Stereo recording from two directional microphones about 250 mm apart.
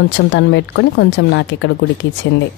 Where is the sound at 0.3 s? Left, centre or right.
Left.